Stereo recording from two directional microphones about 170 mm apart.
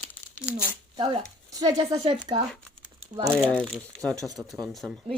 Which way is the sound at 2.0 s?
25° right (ahead or behind).